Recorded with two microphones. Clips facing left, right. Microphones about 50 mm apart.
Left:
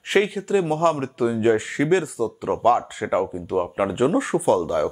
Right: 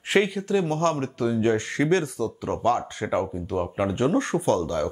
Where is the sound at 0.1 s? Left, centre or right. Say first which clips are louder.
Left 2 dB; centre.